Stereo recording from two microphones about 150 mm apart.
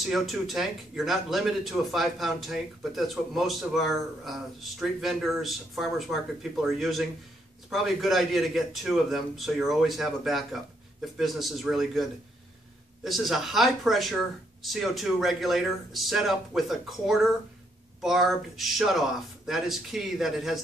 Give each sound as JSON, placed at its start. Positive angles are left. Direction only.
{"t": 0.0, "sound": "speech", "side_deg": 0}